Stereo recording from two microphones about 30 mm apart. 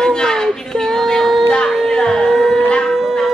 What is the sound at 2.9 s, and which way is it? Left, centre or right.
Shofar, centre.